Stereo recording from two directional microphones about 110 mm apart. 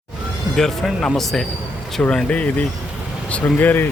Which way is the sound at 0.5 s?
5° left (ahead or behind).